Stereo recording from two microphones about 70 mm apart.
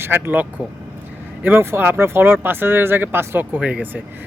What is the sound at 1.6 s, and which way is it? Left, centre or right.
Speech, right.